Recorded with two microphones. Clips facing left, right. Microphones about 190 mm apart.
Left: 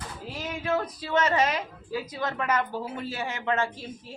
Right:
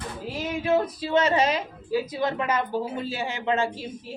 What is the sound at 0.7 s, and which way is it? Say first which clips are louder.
A man's voice: right 5 dB; 25° right (ahead or behind).